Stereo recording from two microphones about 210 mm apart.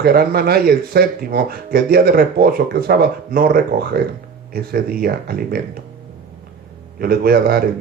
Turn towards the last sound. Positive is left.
turn(degrees=-45)  # may be behind; listen again after turning